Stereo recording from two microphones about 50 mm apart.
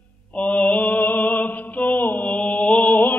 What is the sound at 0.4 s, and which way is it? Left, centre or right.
Mantra, left.